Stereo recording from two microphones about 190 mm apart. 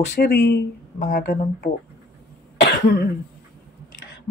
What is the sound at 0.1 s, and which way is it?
Speech, 60° left (ahead or behind).